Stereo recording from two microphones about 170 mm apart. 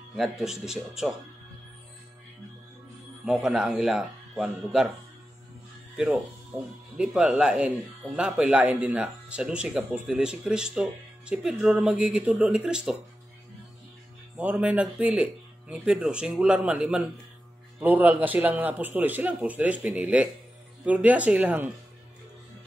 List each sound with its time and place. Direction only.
0.1 s speech: centre (ahead or behind)
3.3 s speech: 5° right (ahead or behind)
7.0 s speech: 5° right (ahead or behind)
14.3 s speech: 10° right (ahead or behind)